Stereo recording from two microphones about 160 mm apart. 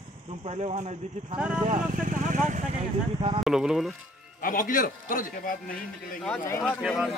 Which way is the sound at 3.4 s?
5° right (ahead or behind).